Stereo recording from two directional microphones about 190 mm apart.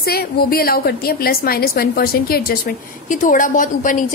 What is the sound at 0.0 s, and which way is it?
A woman's voice, 55° left (ahead or behind).